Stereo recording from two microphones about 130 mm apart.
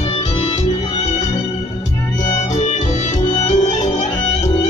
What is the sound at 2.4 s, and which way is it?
Music, 65° left (ahead or behind).